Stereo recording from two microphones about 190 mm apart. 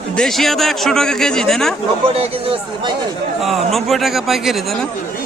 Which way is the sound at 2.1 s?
30° right (ahead or behind).